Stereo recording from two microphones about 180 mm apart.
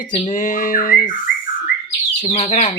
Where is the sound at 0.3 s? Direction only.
45° left (ahead or behind).